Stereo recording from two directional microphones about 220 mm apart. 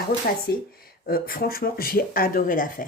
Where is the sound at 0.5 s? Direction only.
45° left (ahead or behind).